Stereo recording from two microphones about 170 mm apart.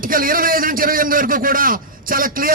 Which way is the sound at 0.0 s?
55° right (ahead or behind).